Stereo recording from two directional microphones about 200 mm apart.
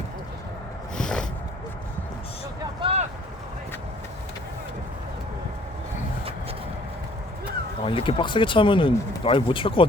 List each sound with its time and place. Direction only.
0.9 s a sound: 5° left (ahead or behind)
2.8 s vehicle: 30° right (ahead or behind)
7.9 s speech: 25° left (ahead or behind)